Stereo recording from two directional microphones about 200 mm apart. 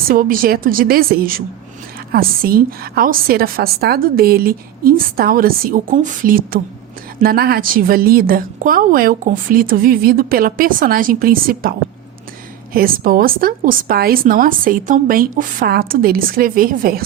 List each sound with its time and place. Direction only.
0.1 s a woman's voice: 45° right (ahead or behind)
12.7 s a woman's voice: 45° right (ahead or behind)